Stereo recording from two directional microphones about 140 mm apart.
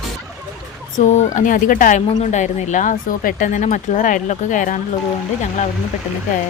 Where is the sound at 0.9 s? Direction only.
55° left (ahead or behind).